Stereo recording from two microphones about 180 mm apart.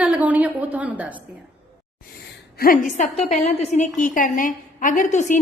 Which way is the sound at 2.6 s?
50° left (ahead or behind).